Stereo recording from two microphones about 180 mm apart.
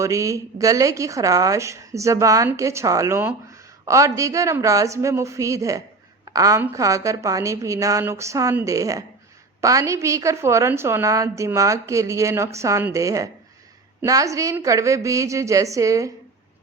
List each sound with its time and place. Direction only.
0.0 s a woman's voice: 15° right (ahead or behind)